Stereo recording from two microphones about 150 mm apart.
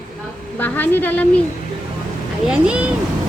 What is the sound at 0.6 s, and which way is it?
Speech, 10° left (ahead or behind).